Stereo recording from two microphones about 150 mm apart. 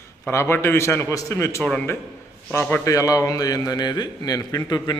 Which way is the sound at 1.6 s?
10° left (ahead or behind).